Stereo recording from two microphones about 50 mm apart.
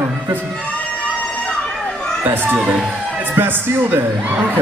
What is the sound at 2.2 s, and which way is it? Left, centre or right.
A man's voice, right.